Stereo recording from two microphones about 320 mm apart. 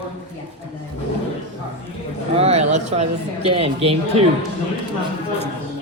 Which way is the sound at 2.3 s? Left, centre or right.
Centre.